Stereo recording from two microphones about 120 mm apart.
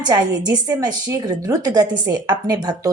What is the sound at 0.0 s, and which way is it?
A woman's voice, 35° right (ahead or behind).